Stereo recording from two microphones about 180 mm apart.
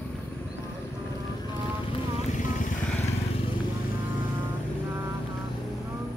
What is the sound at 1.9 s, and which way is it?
Vehicle, 35° left (ahead or behind).